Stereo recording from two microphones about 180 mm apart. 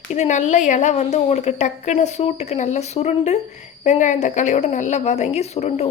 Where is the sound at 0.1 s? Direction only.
40° left (ahead or behind).